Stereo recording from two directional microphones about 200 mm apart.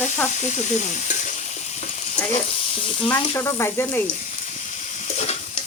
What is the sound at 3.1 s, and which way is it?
Speech, 15° left (ahead or behind).